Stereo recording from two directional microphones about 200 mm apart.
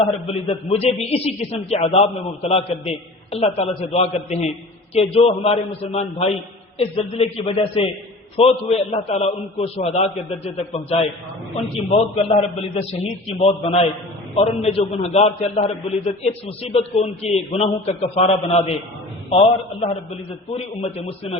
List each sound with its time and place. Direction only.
0.0 s a man's voice: 30° left (ahead or behind)
20.6 s a man's voice: 30° left (ahead or behind)